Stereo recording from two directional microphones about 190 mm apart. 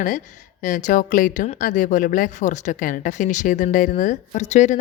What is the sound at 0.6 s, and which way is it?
A woman's voice, 40° left (ahead or behind).